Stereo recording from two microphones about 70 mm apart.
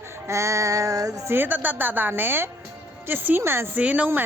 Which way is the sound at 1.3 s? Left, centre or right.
Right.